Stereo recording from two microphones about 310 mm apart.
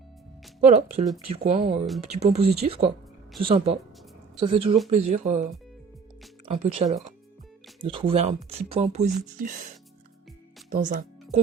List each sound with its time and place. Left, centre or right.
0.6 s speech: right
10.7 s music: right